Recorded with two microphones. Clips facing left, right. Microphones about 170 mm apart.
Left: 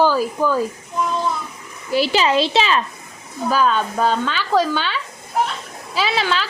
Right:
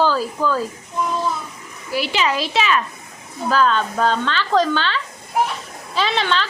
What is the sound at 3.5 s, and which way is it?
A woman's voice, 10° left (ahead or behind).